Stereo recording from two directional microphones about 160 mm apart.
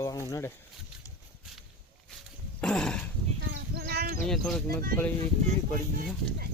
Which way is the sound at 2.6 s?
5° left (ahead or behind).